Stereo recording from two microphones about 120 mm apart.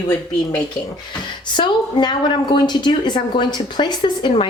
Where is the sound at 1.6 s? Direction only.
40° left (ahead or behind).